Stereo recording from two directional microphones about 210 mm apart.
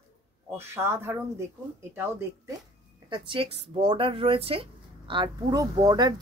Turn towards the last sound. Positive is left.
turn(degrees=-20)  # may be behind; listen again after turning